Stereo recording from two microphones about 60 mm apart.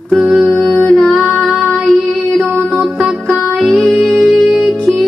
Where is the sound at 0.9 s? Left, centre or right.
Centre.